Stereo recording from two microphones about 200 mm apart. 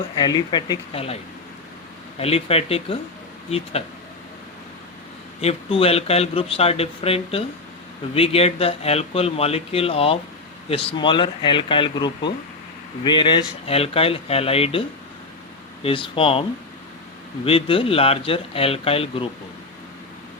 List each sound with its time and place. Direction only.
0.2 s speech: 20° left (ahead or behind)
5.4 s speech: 30° left (ahead or behind)